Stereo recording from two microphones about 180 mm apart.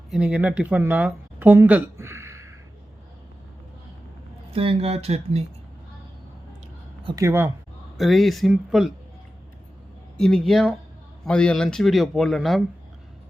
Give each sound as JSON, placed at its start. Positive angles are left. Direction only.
{"t": 0.1, "sound": "speech", "side_deg": -5}
{"t": 4.5, "sound": "speech", "side_deg": -30}
{"t": 7.0, "sound": "speech", "side_deg": -25}
{"t": 7.3, "sound": "speech", "side_deg": -10}
{"t": 7.9, "sound": "speech", "side_deg": 0}
{"t": 10.2, "sound": "speech", "side_deg": 0}